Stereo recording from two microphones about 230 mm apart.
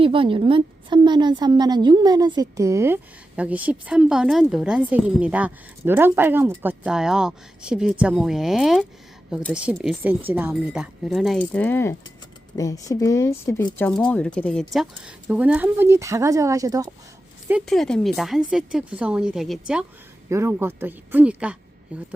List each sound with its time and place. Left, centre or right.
0.0 s a woman's voice: right
17.5 s a woman's voice: centre